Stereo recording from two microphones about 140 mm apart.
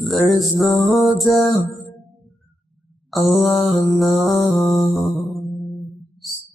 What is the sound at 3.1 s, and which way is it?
Music, centre (ahead or behind).